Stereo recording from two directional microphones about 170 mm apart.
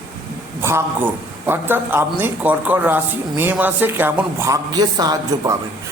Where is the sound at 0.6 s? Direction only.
15° right (ahead or behind).